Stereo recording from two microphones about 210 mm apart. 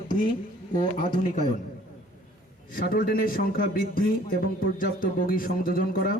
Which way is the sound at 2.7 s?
45° left (ahead or behind).